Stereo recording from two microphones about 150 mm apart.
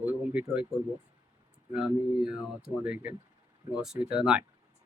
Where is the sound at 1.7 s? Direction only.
5° right (ahead or behind).